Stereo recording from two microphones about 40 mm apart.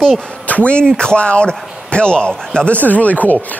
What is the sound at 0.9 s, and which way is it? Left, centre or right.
Speech, left.